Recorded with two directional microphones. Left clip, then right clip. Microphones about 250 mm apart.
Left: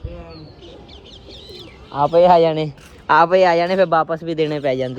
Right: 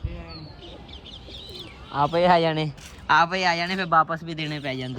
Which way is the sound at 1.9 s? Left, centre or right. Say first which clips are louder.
Left 6 dB; right.